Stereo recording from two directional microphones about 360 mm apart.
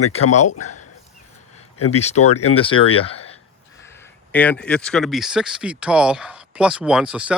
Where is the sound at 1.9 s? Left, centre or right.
Centre.